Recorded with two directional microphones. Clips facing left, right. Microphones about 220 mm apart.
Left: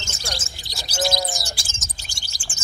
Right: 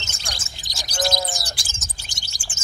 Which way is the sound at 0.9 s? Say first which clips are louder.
Left 1 dB; centre (ahead or behind).